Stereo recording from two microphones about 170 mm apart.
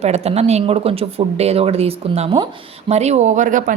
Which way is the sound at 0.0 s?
40° right (ahead or behind).